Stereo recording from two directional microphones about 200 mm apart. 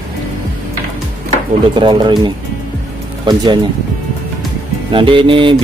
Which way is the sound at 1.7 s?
25° right (ahead or behind).